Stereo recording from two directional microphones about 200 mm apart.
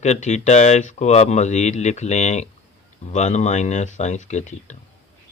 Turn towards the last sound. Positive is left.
turn(degrees=35)  # may be behind; listen again after turning